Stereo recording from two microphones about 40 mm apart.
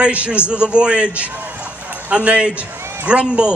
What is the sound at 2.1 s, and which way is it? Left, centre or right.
Speech, right.